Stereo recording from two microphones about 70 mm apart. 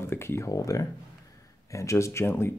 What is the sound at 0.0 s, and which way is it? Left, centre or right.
Speech, left.